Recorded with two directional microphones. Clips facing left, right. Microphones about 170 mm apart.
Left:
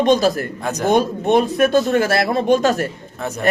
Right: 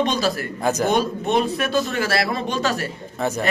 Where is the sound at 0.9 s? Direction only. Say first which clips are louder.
Left 5 dB; 50° left (ahead or behind).